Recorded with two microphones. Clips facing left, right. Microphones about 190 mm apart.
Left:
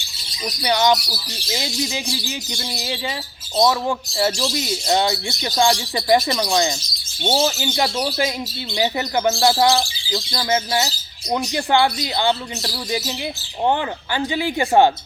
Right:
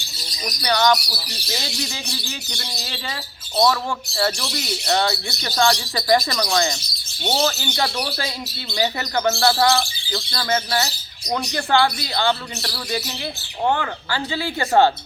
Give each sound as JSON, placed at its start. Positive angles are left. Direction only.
{"t": 0.6, "sound": "speech", "side_deg": 15}